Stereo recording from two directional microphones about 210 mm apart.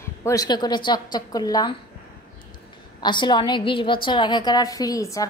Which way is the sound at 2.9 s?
20° left (ahead or behind).